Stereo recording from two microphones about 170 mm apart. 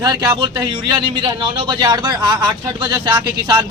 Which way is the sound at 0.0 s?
25° right (ahead or behind).